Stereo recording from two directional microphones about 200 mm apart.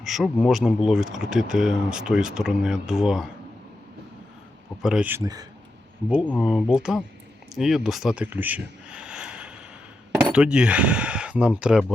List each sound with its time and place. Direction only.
0.0 s speech: centre (ahead or behind)
4.8 s speech: 5° right (ahead or behind)
6.2 s speech: centre (ahead or behind)